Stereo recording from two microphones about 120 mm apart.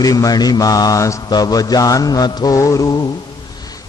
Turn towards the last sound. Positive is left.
turn(degrees=35)  # may be behind; listen again after turning